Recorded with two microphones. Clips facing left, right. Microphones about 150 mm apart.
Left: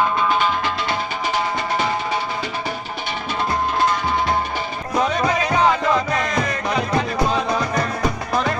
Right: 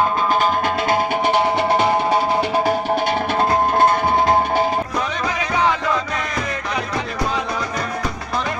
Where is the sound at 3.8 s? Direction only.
50° right (ahead or behind).